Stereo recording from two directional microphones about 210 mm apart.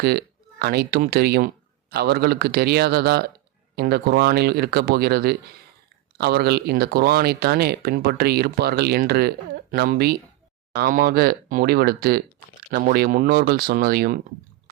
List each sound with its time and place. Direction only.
0.0 s speech: 50° right (ahead or behind)